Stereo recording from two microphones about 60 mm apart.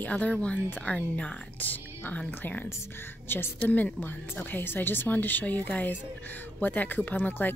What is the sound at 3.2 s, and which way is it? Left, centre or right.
Speech, left.